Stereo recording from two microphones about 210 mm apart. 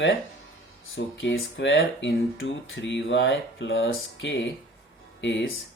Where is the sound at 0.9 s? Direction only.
55° left (ahead or behind).